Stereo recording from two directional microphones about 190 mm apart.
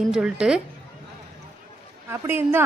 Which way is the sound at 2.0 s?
15° right (ahead or behind).